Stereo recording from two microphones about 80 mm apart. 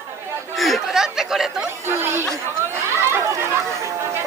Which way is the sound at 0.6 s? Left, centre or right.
Centre.